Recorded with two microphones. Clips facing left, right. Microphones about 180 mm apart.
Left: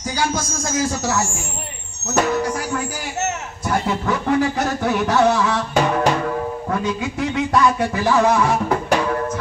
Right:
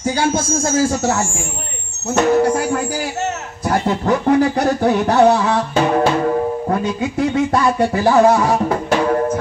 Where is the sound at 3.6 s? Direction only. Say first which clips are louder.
Right 4 dB; 40° right (ahead or behind).